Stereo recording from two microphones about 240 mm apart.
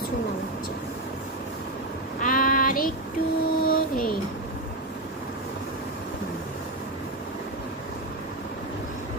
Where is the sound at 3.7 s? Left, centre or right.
Left.